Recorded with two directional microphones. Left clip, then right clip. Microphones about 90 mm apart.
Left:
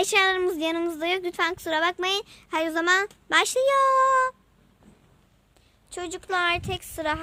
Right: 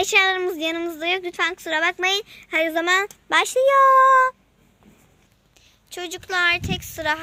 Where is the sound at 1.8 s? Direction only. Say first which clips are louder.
Right 5 dB; 25° left (ahead or behind); by 4.4 s 5° left (ahead or behind).